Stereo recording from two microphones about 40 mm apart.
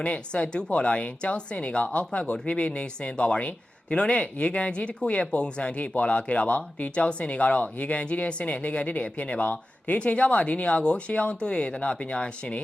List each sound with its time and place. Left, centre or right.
0.0 s speech: left